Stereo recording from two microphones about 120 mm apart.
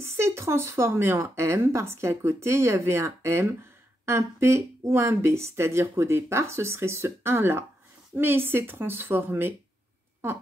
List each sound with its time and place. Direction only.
0.0 s speech: 20° right (ahead or behind)